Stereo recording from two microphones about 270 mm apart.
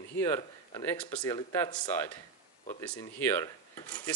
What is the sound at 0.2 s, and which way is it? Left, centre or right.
Speech, centre.